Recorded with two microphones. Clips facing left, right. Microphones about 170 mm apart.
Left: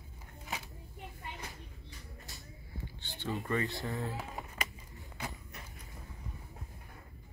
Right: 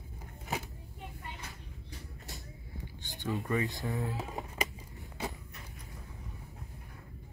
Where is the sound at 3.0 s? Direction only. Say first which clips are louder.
Right 2 dB; 15° right (ahead or behind).